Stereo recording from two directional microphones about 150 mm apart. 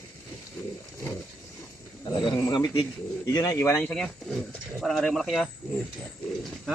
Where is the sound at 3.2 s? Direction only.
20° left (ahead or behind).